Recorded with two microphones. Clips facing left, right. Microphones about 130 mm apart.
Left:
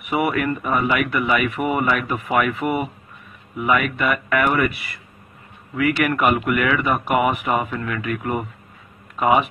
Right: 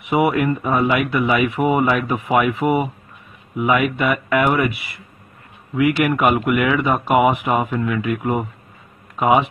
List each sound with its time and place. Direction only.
0.0 s speech: 20° right (ahead or behind)